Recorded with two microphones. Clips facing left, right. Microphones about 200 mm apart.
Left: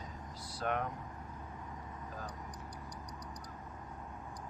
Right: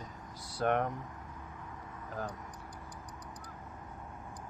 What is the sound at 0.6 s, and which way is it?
Speech, 60° right (ahead or behind).